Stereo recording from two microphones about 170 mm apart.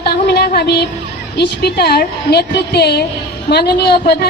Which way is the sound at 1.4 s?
70° left (ahead or behind).